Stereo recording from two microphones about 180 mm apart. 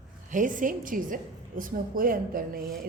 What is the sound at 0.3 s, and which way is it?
A woman's voice, 45° right (ahead or behind).